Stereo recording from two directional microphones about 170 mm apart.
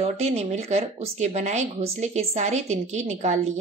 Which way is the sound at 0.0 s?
40° right (ahead or behind).